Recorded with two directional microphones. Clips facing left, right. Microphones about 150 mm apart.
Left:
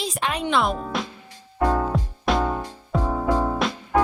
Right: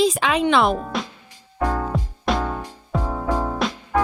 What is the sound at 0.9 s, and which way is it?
Music, centre (ahead or behind).